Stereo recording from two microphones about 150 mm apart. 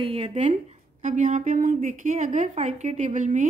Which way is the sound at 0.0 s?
40° right (ahead or behind).